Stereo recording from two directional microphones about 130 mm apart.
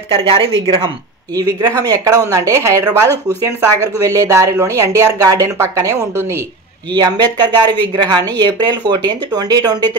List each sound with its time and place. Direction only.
0.1 s speech: 40° right (ahead or behind); by 6.4 s 20° right (ahead or behind)
6.9 s speech: 30° right (ahead or behind)